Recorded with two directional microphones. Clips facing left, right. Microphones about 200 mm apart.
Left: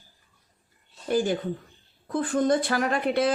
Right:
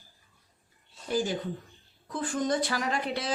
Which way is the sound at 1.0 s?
55° left (ahead or behind).